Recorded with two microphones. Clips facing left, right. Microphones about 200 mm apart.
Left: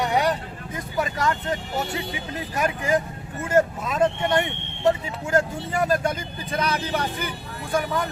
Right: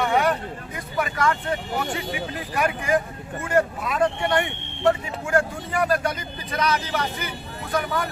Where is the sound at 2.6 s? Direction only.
25° left (ahead or behind).